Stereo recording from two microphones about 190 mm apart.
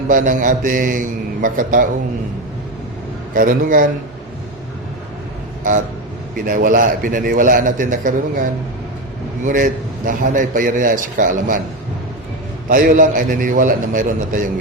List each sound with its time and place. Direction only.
0.1 s a man's voice: 45° right (ahead or behind)
3.3 s a man's voice: 45° right (ahead or behind)
5.7 s a man's voice: 45° right (ahead or behind)
9.4 s a man's voice: 45° right (ahead or behind)
12.6 s a man's voice: 45° right (ahead or behind)